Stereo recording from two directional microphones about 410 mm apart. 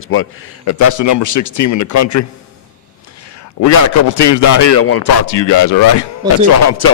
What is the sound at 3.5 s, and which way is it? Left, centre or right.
A man's voice, left.